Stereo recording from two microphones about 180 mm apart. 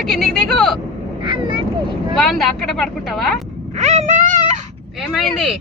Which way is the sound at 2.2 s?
Centre (ahead or behind).